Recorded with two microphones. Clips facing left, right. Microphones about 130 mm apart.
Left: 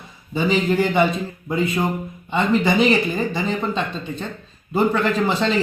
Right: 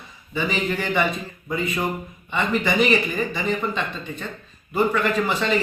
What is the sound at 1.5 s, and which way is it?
Speech, 25° left (ahead or behind).